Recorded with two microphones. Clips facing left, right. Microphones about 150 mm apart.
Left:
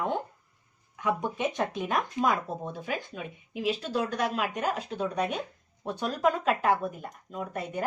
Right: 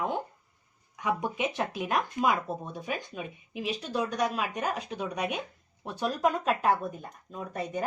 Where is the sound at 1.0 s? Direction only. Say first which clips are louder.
Left 1 dB; 15° right (ahead or behind).